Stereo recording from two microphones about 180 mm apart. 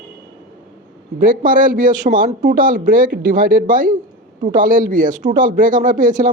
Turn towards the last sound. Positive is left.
turn(degrees=-45)  # may be behind; listen again after turning